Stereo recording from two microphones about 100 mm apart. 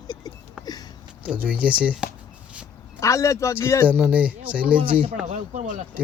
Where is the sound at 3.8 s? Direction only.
15° right (ahead or behind).